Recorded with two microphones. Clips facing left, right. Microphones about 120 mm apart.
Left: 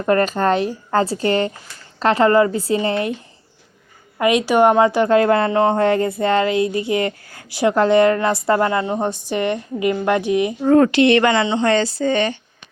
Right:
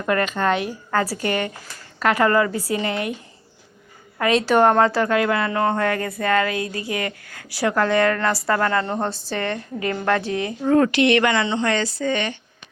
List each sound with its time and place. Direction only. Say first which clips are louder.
0.0 s speech: left 4 dB; 35° left (ahead or behind)
4.2 s a woman's voice: left 2 dB; 15° left (ahead or behind)
5.0 s speech: left 6 dB; 35° left (ahead or behind); by 10.5 s 15° left (ahead or behind)
10.6 s speech: left 3 dB; 35° left (ahead or behind)